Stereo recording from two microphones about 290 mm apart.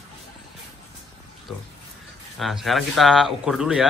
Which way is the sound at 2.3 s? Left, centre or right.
Centre.